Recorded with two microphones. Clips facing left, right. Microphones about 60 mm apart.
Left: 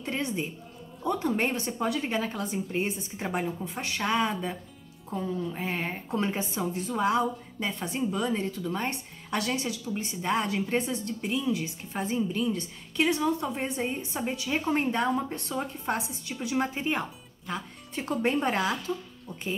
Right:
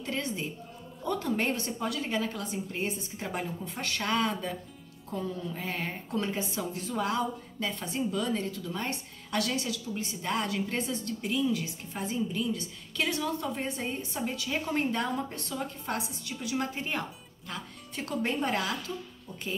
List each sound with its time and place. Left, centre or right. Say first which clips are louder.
0.0 s a woman's voice: left 2 dB; left
11.9 s a woman's voice: left 3 dB; left